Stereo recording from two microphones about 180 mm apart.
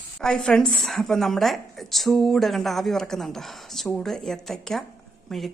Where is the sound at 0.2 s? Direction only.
5° left (ahead or behind).